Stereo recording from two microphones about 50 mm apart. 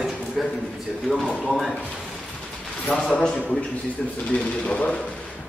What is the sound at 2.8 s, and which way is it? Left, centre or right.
Speech, centre.